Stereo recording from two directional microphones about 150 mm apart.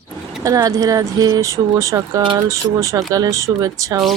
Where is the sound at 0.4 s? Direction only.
25° right (ahead or behind).